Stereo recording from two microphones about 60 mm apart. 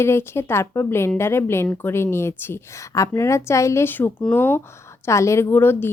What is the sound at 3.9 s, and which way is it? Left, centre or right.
Speech, left.